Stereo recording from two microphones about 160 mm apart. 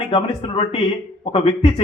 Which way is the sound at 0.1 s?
40° left (ahead or behind).